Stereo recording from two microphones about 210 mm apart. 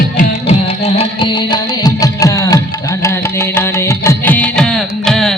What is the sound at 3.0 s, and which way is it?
Carnatic music, 10° left (ahead or behind).